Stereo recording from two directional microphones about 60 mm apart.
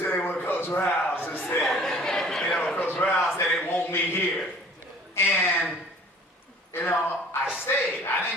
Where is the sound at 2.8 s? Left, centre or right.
Left.